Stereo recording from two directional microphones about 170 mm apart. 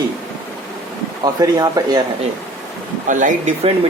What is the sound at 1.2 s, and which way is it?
Speech, 20° right (ahead or behind).